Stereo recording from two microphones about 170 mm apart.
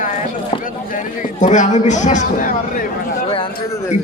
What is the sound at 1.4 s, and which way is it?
A man's voice, 45° left (ahead or behind).